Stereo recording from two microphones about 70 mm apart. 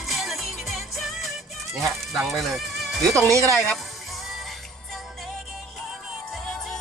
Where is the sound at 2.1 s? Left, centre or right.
Centre.